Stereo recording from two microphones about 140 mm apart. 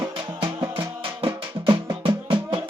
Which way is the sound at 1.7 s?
35° right (ahead or behind).